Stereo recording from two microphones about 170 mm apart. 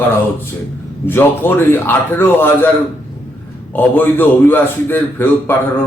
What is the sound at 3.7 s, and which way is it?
A man's voice, 10° left (ahead or behind).